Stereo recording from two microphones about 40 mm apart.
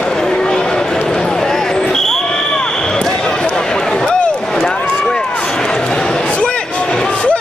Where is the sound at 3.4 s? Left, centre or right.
Centre.